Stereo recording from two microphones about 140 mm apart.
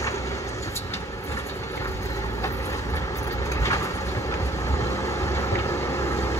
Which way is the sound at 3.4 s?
20° left (ahead or behind).